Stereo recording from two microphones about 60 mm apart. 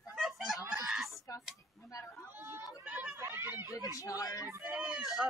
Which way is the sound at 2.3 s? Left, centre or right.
Right.